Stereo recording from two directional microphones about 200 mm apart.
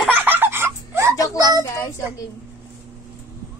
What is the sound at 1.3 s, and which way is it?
Speech, 20° right (ahead or behind).